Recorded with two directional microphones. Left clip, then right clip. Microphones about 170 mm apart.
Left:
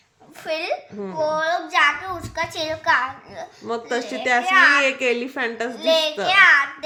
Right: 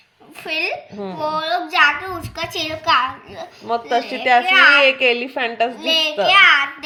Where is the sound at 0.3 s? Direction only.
20° left (ahead or behind).